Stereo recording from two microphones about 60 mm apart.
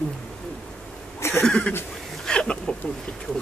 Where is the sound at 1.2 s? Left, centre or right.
Left.